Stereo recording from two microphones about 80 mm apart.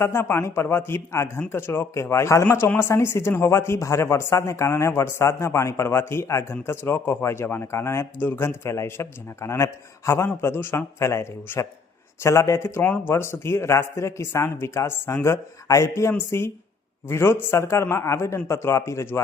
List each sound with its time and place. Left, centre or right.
0.0 s speech: left
12.8 s speech: left